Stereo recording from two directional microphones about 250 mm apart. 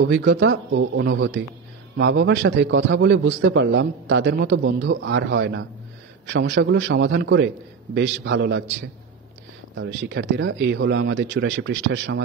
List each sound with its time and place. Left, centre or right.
0.0 s a man's voice: right
9.8 s a man's voice: right